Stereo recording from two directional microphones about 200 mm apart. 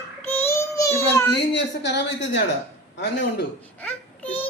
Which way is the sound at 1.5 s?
60° left (ahead or behind).